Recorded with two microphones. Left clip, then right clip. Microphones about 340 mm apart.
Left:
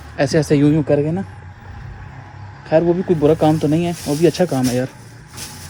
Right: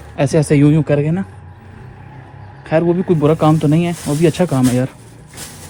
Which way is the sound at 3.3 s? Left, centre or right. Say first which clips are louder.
Right 1 dB; right.